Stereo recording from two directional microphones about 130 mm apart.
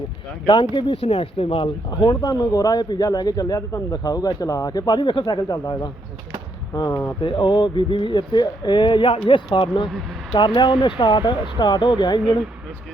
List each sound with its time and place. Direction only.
0.4 s speech: 40° left (ahead or behind)
2.2 s speech: 30° left (ahead or behind)